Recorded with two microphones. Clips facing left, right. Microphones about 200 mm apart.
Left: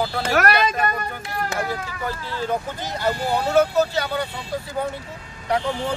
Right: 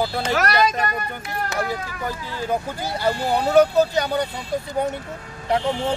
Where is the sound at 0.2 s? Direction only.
55° left (ahead or behind).